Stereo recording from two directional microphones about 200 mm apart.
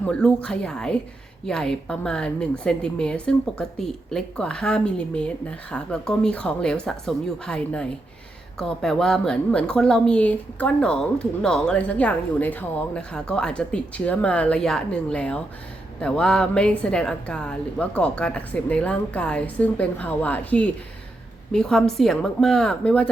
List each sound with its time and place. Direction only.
0.0 s a woman's voice: 5° left (ahead or behind)